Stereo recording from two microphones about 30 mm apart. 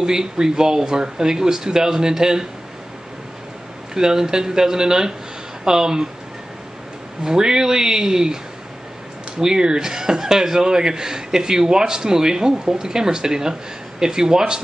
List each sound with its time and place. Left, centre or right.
0.0 s a man's voice: right
3.9 s a man's voice: centre
7.2 s a man's voice: right
9.4 s a man's voice: right